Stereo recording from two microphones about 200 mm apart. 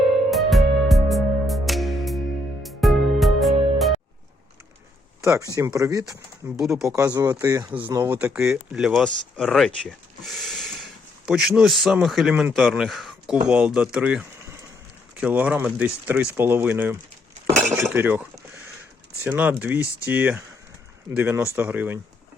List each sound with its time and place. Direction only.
0.3 s music: centre (ahead or behind)
5.2 s speech: 15° right (ahead or behind)
6.6 s speech: centre (ahead or behind)
6.9 s speech: 15° right (ahead or behind)